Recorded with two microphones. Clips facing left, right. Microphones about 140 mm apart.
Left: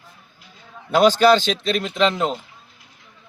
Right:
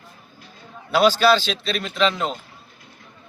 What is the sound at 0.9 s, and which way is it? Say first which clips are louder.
Speech: left 2 dB; 20° left (ahead or behind).